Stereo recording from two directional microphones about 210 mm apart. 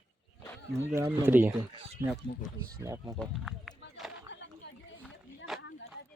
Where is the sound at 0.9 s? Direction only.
10° right (ahead or behind).